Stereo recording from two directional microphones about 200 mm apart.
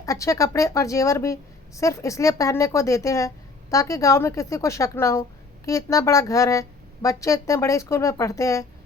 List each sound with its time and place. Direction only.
0.0 s a woman's voice: 15° left (ahead or behind)